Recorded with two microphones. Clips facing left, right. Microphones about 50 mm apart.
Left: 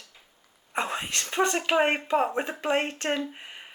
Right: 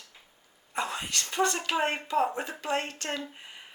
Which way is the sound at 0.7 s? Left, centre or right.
Left.